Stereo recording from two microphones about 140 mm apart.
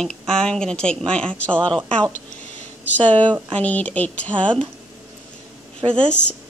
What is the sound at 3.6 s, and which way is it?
Speech, 10° left (ahead or behind).